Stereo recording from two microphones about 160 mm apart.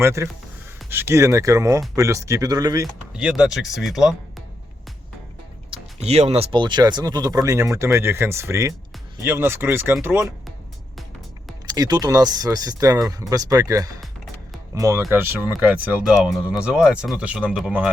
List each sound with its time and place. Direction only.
0.0 s speech: 15° right (ahead or behind)
3.2 s speech: 5° right (ahead or behind)
5.7 s speech: 40° right (ahead or behind); by 10.3 s 15° right (ahead or behind)
11.6 s speech: 25° right (ahead or behind); by 17.9 s 5° right (ahead or behind)